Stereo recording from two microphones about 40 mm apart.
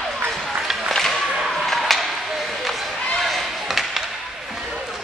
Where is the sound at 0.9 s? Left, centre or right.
Centre.